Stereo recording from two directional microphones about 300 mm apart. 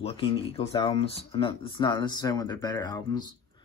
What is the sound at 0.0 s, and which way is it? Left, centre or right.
Speech, centre.